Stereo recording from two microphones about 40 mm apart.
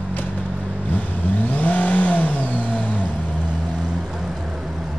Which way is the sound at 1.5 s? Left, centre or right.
Left.